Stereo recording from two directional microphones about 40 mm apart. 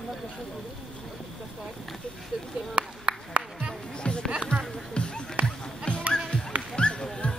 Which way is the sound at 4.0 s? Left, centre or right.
Left.